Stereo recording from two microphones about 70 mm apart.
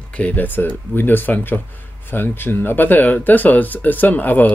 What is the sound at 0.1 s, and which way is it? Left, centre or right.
Speech, left.